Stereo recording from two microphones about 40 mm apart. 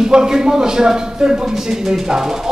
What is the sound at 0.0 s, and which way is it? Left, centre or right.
Speech, centre.